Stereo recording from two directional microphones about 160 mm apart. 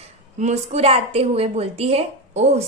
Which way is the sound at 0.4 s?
45° right (ahead or behind).